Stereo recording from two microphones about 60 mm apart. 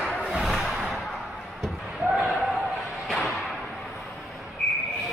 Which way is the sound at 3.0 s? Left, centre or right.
Centre.